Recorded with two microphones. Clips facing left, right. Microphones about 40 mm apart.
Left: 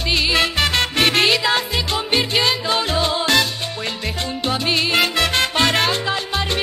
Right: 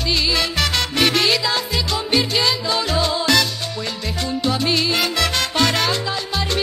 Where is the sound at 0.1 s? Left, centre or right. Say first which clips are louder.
Left 3 dB; left.